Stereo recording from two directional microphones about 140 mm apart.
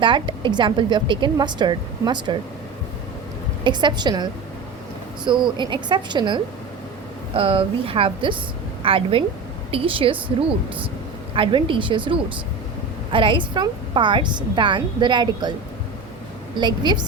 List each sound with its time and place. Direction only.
0.0 s a woman's voice: 35° right (ahead or behind)
3.6 s a woman's voice: 35° right (ahead or behind)
11.3 s a woman's voice: 35° right (ahead or behind)
16.6 s a woman's voice: 35° right (ahead or behind)